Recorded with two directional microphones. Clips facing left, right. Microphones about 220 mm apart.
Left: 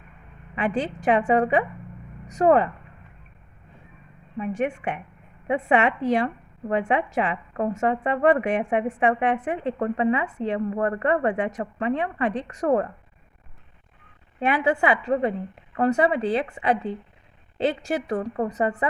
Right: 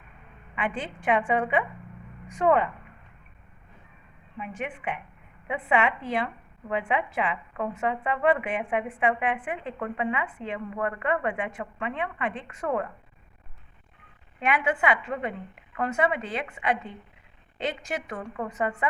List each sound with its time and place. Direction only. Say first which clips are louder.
0.5 s a woman's voice: left 6 dB; 40° left (ahead or behind)
4.4 s a woman's voice: left 9 dB; 40° left (ahead or behind)
14.3 s a woman's voice: left 4 dB; 35° left (ahead or behind)